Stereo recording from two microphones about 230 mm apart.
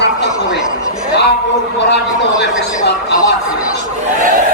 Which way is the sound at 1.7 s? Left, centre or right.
Left.